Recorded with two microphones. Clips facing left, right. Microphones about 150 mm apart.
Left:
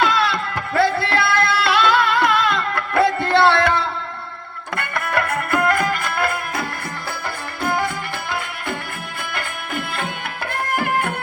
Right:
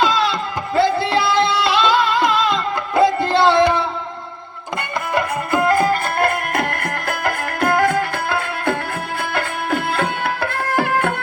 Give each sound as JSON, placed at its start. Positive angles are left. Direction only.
{"t": 0.0, "sound": "music", "side_deg": -20}
{"t": 5.1, "sound": "music", "side_deg": -20}
{"t": 6.5, "sound": "music", "side_deg": -90}
{"t": 10.4, "sound": "music", "side_deg": -90}